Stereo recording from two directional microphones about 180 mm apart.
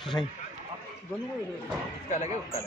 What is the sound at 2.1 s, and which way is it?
Speech, 40° left (ahead or behind).